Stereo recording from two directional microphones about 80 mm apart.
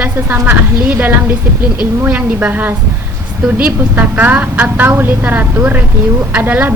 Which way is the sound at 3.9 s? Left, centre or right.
Right.